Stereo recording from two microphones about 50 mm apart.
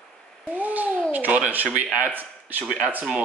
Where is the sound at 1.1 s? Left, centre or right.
Right.